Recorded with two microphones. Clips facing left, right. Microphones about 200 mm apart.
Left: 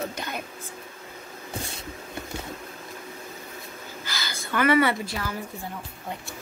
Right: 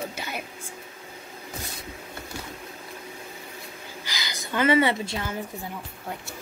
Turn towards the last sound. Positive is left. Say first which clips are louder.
# right 1 dB
turn(degrees=-25)  # may be behind; listen again after turning